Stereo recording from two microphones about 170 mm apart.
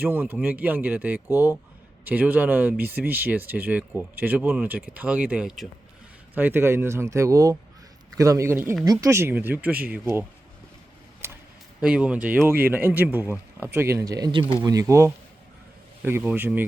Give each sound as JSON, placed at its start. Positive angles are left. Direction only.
{"t": 0.0, "sound": "speech", "side_deg": -10}
{"t": 11.2, "sound": "a sound", "side_deg": -15}
{"t": 11.8, "sound": "speech", "side_deg": -5}